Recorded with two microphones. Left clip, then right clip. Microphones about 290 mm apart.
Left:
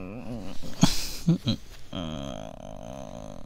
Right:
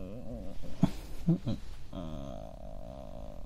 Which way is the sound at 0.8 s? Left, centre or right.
Left.